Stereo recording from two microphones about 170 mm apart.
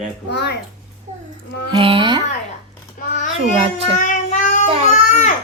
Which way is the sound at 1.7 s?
30° right (ahead or behind).